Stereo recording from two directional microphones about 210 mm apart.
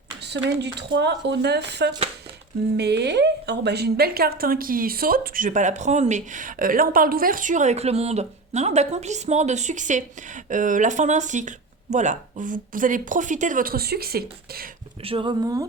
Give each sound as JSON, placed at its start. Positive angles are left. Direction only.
{"t": 0.2, "sound": "a sound", "side_deg": -55}
{"t": 0.6, "sound": "a woman's voice", "side_deg": -55}
{"t": 15.0, "sound": "speech", "side_deg": -25}